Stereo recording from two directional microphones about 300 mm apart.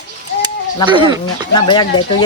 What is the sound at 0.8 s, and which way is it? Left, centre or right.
Speech, centre.